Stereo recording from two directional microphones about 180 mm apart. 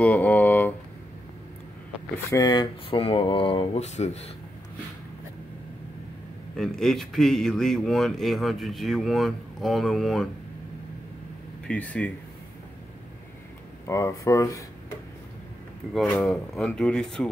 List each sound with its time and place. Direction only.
0.0 s speech: 10° left (ahead or behind)
2.3 s speech: 20° left (ahead or behind); by 4.3 s 40° left (ahead or behind)
6.5 s a man's voice: centre (ahead or behind)
11.6 s speech: 5° left (ahead or behind)
13.8 s speech: 15° left (ahead or behind)
15.8 s a man's voice: centre (ahead or behind)